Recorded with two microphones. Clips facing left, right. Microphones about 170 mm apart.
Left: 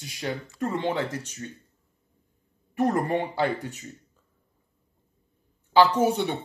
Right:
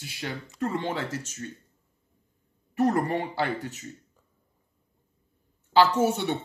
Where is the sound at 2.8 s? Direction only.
15° left (ahead or behind).